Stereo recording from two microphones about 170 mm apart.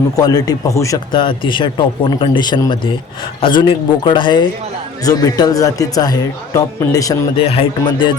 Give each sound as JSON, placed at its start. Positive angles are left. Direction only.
{"t": 0.2, "sound": "speech", "side_deg": 20}
{"t": 1.1, "sound": "speech", "side_deg": 30}
{"t": 7.3, "sound": "speech", "side_deg": 35}